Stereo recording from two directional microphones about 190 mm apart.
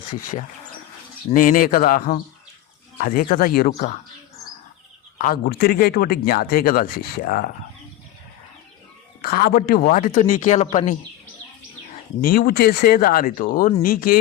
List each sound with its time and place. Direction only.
0.1 s speech: 40° left (ahead or behind)
5.1 s speech: 50° left (ahead or behind)
9.2 s a man's voice: 55° left (ahead or behind); by 10.9 s 35° left (ahead or behind)
12.2 s speech: 50° left (ahead or behind)